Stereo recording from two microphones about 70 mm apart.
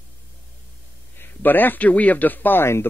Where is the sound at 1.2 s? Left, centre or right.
Left.